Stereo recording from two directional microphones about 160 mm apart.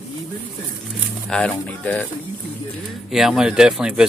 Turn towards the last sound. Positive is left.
turn(degrees=-5)  # may be behind; listen again after turning